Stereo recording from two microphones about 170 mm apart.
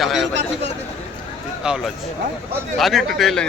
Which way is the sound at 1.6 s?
5° right (ahead or behind).